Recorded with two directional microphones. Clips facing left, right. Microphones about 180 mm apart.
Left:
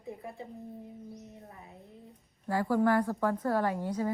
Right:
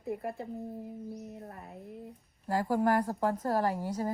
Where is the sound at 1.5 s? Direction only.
60° right (ahead or behind).